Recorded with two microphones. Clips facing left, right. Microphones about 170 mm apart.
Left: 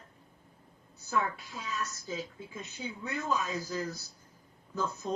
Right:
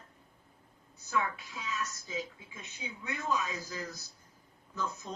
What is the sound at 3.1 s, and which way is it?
Speech, 35° left (ahead or behind).